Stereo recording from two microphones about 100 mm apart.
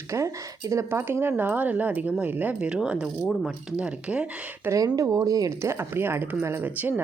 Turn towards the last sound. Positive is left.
turn(degrees=-20)  # may be behind; listen again after turning